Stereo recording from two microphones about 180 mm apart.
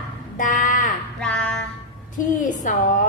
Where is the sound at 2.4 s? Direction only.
45° left (ahead or behind).